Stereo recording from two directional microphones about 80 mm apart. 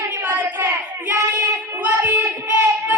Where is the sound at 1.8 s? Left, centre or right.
Right.